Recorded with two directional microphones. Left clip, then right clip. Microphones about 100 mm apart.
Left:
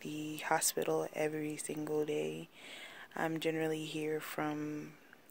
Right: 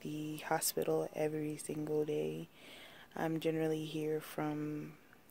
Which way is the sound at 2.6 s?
35° right (ahead or behind).